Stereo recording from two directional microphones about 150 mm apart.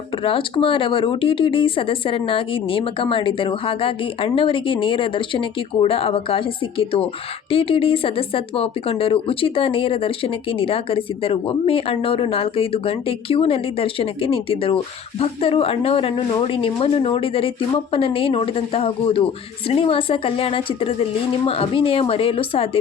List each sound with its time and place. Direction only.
0.2 s speech: 35° left (ahead or behind)